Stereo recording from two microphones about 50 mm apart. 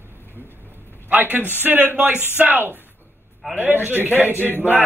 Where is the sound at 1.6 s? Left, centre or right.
Right.